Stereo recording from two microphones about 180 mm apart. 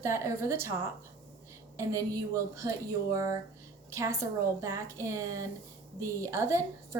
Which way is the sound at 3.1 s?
20° right (ahead or behind).